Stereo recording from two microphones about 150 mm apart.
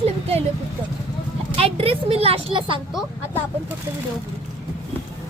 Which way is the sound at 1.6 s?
40° right (ahead or behind).